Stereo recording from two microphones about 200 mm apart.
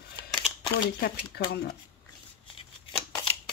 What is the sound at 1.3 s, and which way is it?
Speech, 50° left (ahead or behind).